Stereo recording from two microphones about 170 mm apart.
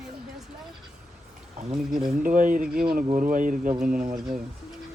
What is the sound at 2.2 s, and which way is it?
Speech, 50° right (ahead or behind).